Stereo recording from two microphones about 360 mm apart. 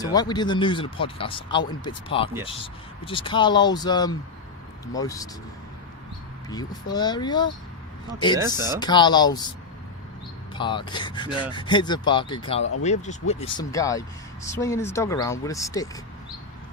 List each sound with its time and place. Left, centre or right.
0.0 s speech: centre
6.5 s speech: centre
8.4 s speech: centre
8.8 s speech: centre
10.5 s speech: centre